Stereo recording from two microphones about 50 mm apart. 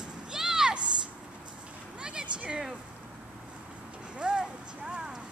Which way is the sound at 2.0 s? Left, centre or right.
Centre.